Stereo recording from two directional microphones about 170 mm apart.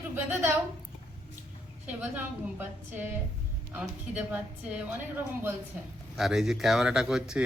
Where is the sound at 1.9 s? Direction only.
10° right (ahead or behind).